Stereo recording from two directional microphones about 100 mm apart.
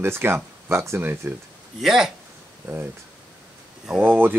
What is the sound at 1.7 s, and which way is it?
Speech, 5° right (ahead or behind).